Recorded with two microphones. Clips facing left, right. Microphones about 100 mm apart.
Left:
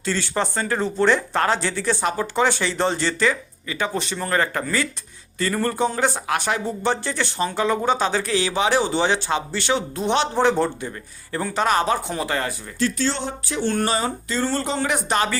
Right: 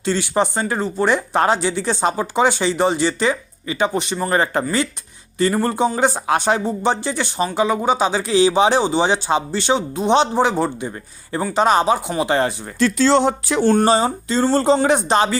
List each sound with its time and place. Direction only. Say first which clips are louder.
0.0 s speech: right 5 dB; 20° right (ahead or behind)
12.3 s speech: right 8 dB; 25° right (ahead or behind)
12.8 s speech: right 9 dB; 90° right
13.7 s speech: right 7 dB; 30° right (ahead or behind)